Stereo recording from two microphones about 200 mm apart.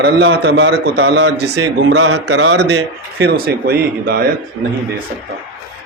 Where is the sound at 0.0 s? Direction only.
60° right (ahead or behind).